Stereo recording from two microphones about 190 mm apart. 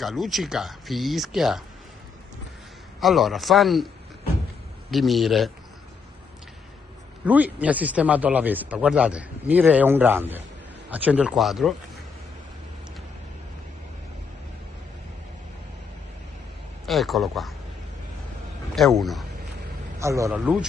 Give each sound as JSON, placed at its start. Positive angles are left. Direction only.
{"t": 0.0, "sound": "speech", "side_deg": 0}
{"t": 3.0, "sound": "speech", "side_deg": 0}
{"t": 4.9, "sound": "speech", "side_deg": 0}
{"t": 7.2, "sound": "speech", "side_deg": -10}
{"t": 16.8, "sound": "speech", "side_deg": 0}
{"t": 18.8, "sound": "speech", "side_deg": 0}
{"t": 20.0, "sound": "a man's voice", "side_deg": -15}